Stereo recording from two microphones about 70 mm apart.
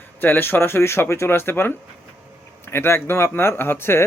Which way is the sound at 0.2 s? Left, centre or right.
Left.